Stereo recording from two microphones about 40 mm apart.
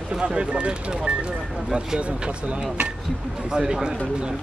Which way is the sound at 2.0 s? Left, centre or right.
Right.